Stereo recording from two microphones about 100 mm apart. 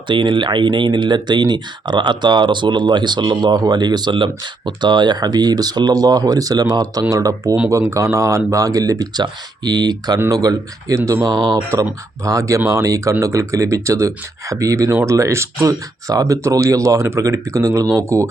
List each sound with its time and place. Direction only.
0.1 s speech: 55° right (ahead or behind)
12.2 s speech: 30° right (ahead or behind)